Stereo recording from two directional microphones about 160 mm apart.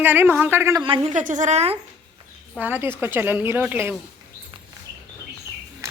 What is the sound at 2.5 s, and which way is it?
A woman's voice, 10° right (ahead or behind).